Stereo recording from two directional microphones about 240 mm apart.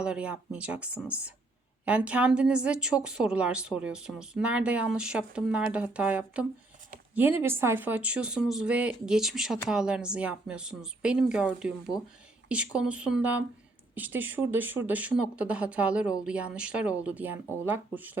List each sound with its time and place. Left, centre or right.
0.0 s speech: centre
11.9 s speech: centre
12.5 s speech: centre